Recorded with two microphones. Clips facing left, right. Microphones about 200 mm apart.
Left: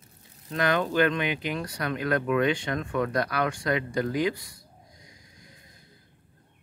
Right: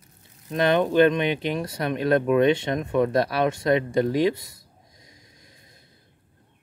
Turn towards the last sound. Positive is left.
turn(degrees=-25)  # may be behind; listen again after turning